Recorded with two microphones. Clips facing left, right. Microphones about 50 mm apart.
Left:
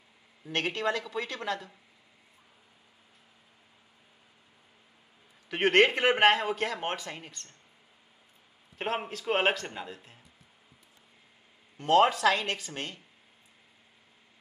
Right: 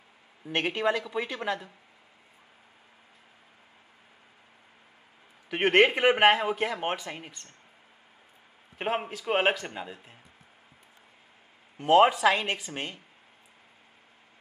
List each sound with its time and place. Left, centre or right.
0.5 s speech: centre
5.5 s speech: centre
8.7 s speech: centre
11.8 s speech: centre